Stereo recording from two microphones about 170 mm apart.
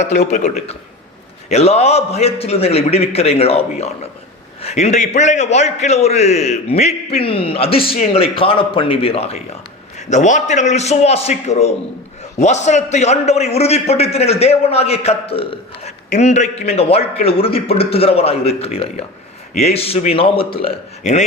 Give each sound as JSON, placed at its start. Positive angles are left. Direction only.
{"t": 0.3, "sound": "a man's voice", "side_deg": 45}